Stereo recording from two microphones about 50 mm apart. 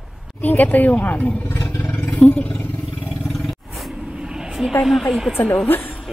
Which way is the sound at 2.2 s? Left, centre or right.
Left.